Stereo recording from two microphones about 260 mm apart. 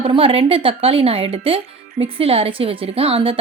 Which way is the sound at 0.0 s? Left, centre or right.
Centre.